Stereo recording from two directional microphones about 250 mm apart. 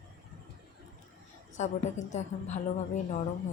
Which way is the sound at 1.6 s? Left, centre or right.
Left.